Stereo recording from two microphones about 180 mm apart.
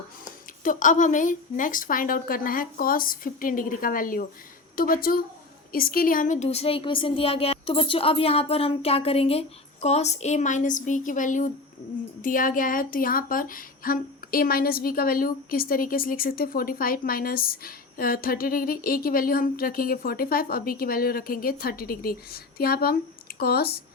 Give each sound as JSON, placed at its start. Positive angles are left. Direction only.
{"t": 0.6, "sound": "a woman's voice", "side_deg": 45}